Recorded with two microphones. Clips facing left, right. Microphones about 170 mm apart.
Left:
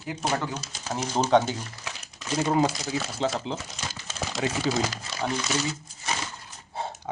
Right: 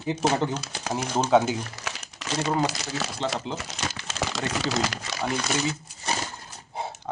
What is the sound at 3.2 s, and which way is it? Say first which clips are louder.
Speech: left 2 dB; 5° left (ahead or behind).